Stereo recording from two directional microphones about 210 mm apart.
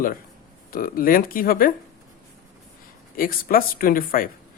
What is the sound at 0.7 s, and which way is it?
Speech, 45° left (ahead or behind).